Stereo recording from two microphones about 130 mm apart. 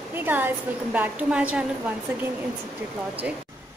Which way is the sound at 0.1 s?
15° right (ahead or behind).